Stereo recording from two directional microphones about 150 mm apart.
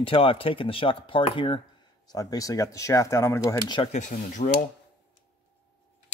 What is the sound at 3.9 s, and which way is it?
Speech, 55° left (ahead or behind).